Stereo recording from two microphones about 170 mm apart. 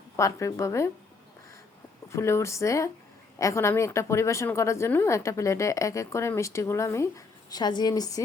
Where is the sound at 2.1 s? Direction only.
15° left (ahead or behind).